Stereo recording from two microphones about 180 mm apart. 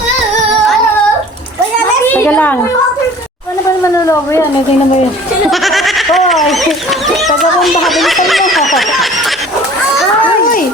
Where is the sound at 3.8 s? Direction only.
15° left (ahead or behind).